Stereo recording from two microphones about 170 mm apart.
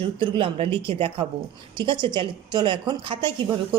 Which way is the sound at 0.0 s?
30° right (ahead or behind).